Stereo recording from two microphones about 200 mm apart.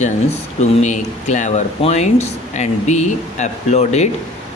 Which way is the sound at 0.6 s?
35° left (ahead or behind).